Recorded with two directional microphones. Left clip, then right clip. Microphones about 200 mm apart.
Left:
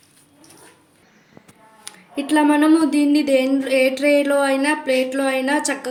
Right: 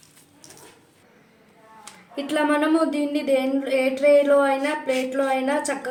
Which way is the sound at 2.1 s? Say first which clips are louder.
Left 5 dB; 45° left (ahead or behind).